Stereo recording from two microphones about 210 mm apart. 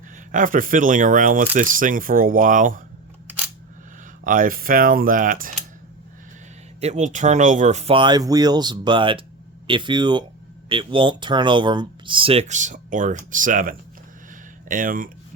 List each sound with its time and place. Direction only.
0.3 s speech: 40° right (ahead or behind)
4.2 s speech: 40° right (ahead or behind)
6.8 s speech: 35° right (ahead or behind)